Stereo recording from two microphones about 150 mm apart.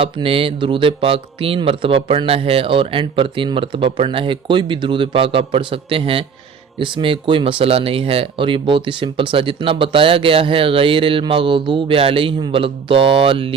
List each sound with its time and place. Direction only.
0.0 s speech: 40° right (ahead or behind)